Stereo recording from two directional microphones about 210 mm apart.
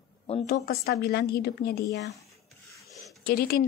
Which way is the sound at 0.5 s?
45° left (ahead or behind).